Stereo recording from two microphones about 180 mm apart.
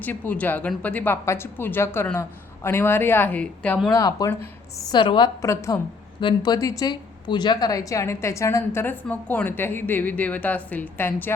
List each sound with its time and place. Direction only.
0.0 s speech: 10° left (ahead or behind)
3.9 s a woman's voice: 20° left (ahead or behind)